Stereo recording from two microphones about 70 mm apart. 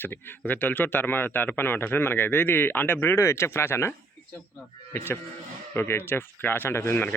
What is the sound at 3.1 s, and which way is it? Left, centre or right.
Speech, left.